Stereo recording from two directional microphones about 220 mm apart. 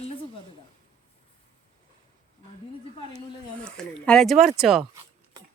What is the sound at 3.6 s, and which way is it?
Speech, 5° left (ahead or behind).